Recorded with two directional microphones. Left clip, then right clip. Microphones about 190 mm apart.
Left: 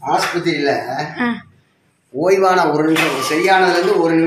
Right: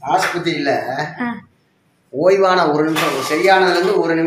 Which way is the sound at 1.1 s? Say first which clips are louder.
Left 4 dB; 20° left (ahead or behind).